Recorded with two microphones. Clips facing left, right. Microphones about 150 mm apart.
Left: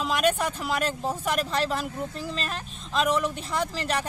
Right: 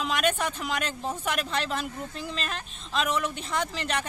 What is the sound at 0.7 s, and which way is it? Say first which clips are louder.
Speech: left 4 dB; 40° left (ahead or behind).